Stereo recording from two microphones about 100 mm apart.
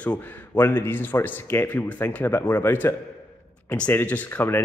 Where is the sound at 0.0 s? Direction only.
15° left (ahead or behind).